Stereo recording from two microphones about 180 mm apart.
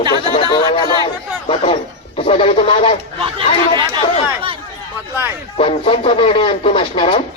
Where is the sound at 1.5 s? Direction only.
30° left (ahead or behind).